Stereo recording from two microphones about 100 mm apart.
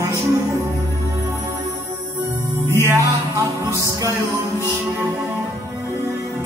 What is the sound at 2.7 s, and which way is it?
Music, 25° right (ahead or behind).